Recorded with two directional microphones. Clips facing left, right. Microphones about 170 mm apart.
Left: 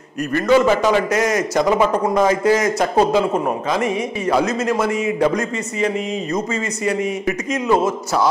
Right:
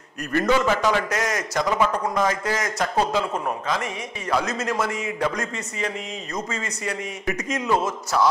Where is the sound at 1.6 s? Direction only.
25° left (ahead or behind).